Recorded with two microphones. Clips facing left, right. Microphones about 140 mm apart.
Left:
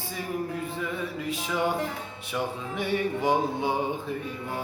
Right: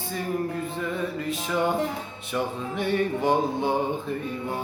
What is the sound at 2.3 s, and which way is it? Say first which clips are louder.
Music: right 3 dB; 10° left (ahead or behind).